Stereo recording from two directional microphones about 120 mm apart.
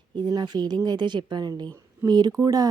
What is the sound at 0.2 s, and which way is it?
Speech, 35° right (ahead or behind).